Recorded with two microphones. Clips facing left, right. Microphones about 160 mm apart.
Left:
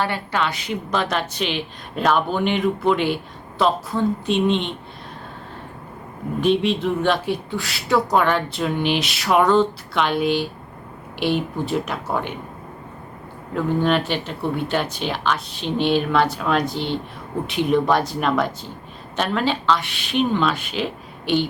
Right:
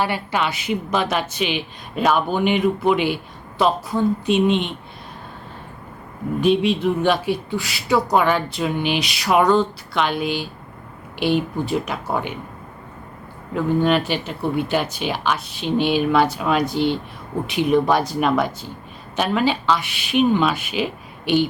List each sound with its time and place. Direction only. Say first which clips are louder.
0.0 s a woman's voice: right 1 dB; 10° right (ahead or behind)
6.4 s speech: right 1 dB; 5° right (ahead or behind)
13.5 s a woman's voice: right 1 dB; 5° right (ahead or behind)